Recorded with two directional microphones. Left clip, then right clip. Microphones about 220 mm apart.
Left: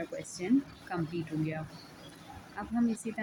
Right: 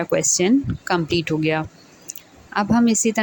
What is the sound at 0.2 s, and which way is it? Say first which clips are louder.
Speech: right 14 dB; 40° right (ahead or behind).